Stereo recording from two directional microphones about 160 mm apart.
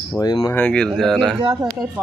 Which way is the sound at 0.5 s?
5° left (ahead or behind).